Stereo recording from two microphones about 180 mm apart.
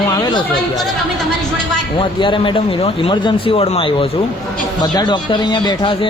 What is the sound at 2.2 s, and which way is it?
Speech, 25° left (ahead or behind).